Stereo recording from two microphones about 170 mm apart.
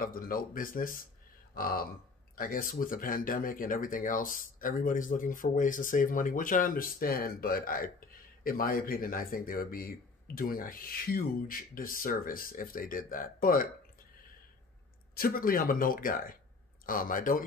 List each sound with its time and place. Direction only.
0.0 s speech: 55° left (ahead or behind)
15.1 s speech: 60° left (ahead or behind)